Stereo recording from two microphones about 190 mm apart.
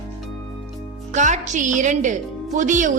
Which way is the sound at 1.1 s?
40° right (ahead or behind).